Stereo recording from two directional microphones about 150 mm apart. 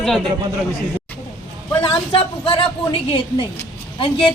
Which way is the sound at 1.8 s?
40° left (ahead or behind).